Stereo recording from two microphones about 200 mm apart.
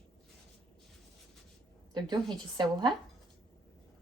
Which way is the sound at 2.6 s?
20° right (ahead or behind).